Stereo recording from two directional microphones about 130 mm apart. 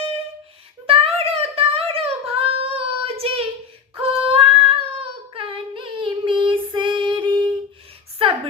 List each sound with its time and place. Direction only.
0.9 s child singing: 45° right (ahead or behind)
3.9 s female singing: 40° right (ahead or behind)